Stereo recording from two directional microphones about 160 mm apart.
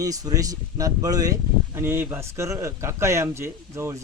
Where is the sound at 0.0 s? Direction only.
20° right (ahead or behind).